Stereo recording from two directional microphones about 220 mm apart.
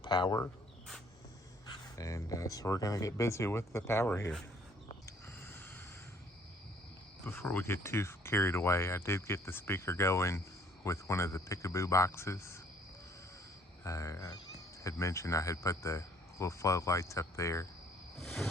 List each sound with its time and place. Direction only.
0.0 s speech: 20° left (ahead or behind)
2.0 s speech: 15° left (ahead or behind)
5.0 s a sound: 10° left (ahead or behind)
7.3 s speech: 10° left (ahead or behind)
13.8 s speech: 15° left (ahead or behind)
18.2 s a sound: centre (ahead or behind)